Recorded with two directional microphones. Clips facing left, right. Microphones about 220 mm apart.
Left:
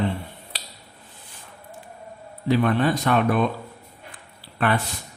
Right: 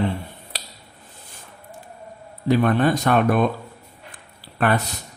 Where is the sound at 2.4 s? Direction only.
45° right (ahead or behind).